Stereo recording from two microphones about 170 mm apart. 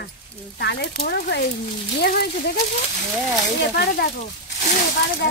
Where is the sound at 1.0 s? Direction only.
70° left (ahead or behind).